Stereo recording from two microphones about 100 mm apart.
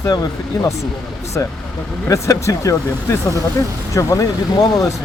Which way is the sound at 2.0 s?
30° left (ahead or behind).